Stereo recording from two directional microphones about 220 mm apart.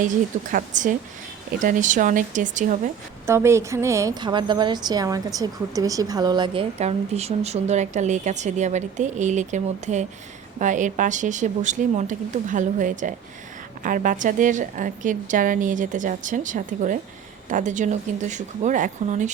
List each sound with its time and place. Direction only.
0.5 s a woman's voice: 35° right (ahead or behind)
3.2 s a woman's voice: 10° right (ahead or behind); by 19.3 s 35° right (ahead or behind)